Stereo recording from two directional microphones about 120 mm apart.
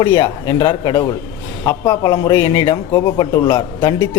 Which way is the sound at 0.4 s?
35° left (ahead or behind).